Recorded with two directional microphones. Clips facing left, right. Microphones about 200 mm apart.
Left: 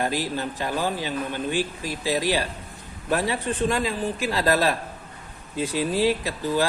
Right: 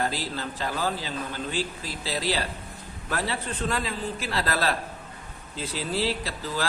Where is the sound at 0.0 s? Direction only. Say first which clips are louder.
Left 4 dB; 15° left (ahead or behind).